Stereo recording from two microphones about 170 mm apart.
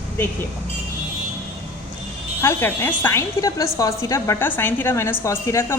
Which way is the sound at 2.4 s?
15° left (ahead or behind).